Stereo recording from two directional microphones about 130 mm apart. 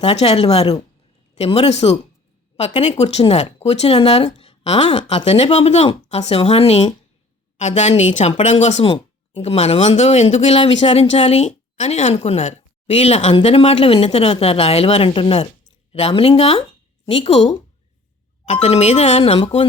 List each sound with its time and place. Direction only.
0.0 s speech: 55° left (ahead or behind)
7.6 s speech: 60° left (ahead or behind)
8.8 s speech: 50° left (ahead or behind)
18.4 s speech: 60° left (ahead or behind)
19.4 s speech: 40° left (ahead or behind)